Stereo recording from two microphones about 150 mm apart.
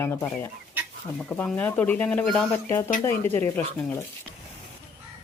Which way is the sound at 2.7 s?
20° left (ahead or behind).